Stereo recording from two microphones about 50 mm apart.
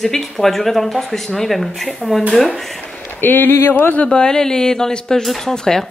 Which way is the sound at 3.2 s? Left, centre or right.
Left.